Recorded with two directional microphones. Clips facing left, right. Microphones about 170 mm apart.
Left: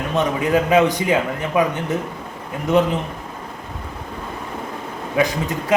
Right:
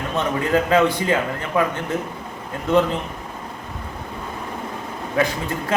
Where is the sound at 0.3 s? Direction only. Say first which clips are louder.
Left 1 dB; 15° left (ahead or behind).